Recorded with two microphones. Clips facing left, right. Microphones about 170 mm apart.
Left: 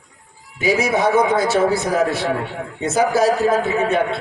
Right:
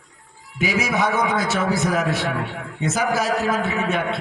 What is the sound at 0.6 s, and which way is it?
A man's voice, 30° left (ahead or behind).